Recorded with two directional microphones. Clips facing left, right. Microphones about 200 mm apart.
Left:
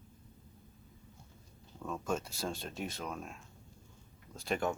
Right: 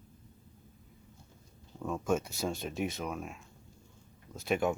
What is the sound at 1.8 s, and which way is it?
Speech, 10° right (ahead or behind).